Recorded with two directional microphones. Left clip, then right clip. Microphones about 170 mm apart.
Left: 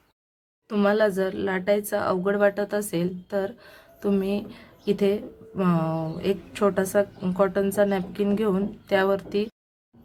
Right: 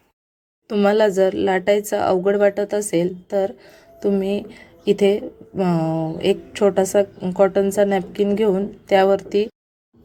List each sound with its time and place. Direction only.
0.7 s a woman's voice: 25° right (ahead or behind)